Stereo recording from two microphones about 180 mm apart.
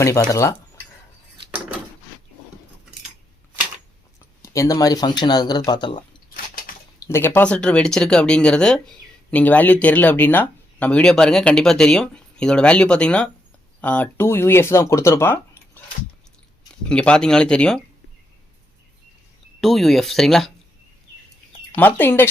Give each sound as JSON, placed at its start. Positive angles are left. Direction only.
{"t": 0.0, "sound": "speech", "side_deg": 15}
{"t": 4.4, "sound": "speech", "side_deg": 15}
{"t": 7.0, "sound": "speech", "side_deg": 15}
{"t": 16.9, "sound": "speech", "side_deg": 5}
{"t": 19.6, "sound": "speech", "side_deg": 0}
{"t": 21.8, "sound": "speech", "side_deg": 10}